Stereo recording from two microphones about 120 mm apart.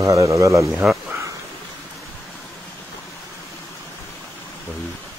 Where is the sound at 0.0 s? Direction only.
30° right (ahead or behind).